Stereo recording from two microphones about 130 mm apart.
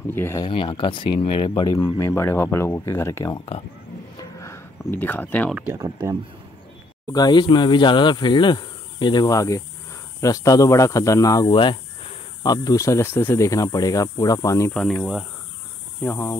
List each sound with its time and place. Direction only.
0.1 s speech: 15° left (ahead or behind)
0.5 s speech: 40° left (ahead or behind)
2.0 s speech: 20° left (ahead or behind)
4.2 s a sound: 25° left (ahead or behind)
5.5 s speech: 15° right (ahead or behind)
5.8 s speech: 25° right (ahead or behind)
7.1 s speech: 30° left (ahead or behind)
12.4 s speech: 25° left (ahead or behind)
14.7 s speech: 5° left (ahead or behind)
16.0 s speech: 15° left (ahead or behind)